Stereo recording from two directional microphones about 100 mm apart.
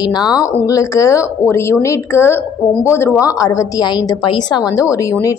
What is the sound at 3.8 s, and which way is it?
A woman's voice, 45° left (ahead or behind).